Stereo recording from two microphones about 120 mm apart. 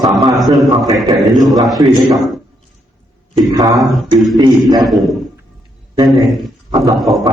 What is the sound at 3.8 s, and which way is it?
A man's voice, centre (ahead or behind).